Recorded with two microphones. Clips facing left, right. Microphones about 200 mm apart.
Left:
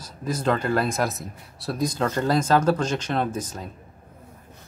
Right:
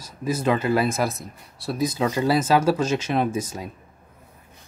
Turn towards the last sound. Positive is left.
turn(degrees=-10)  # may be behind; listen again after turning